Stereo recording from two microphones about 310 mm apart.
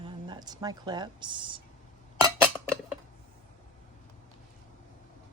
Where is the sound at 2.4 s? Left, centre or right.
Centre.